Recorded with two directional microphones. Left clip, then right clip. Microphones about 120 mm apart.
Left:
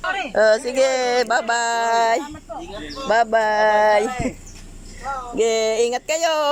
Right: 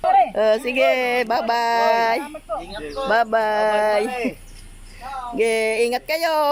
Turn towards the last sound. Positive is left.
turn(degrees=-5)  # may be behind; listen again after turning